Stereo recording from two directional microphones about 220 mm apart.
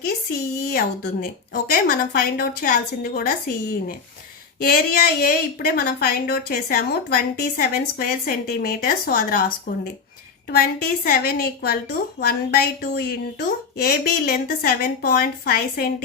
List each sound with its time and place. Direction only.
0.0 s a woman's voice: 40° left (ahead or behind)